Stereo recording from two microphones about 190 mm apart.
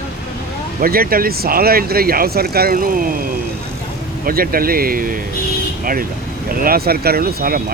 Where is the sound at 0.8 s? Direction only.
50° right (ahead or behind).